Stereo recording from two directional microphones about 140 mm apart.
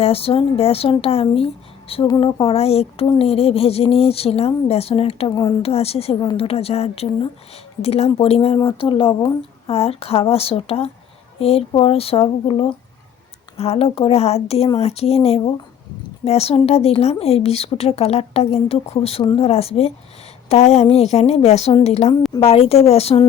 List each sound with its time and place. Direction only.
0.0 s a woman's voice: 45° left (ahead or behind)
5.3 s speech: 25° left (ahead or behind)
5.6 s a woman's voice: 45° left (ahead or behind)